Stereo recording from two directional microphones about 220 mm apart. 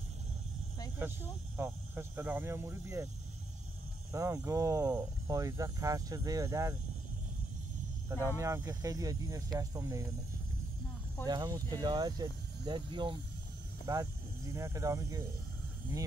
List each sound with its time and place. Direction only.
1.6 s speech: 10° right (ahead or behind)
4.1 s speech: 15° right (ahead or behind)
8.4 s speech: 15° right (ahead or behind)
11.2 s speech: 15° right (ahead or behind)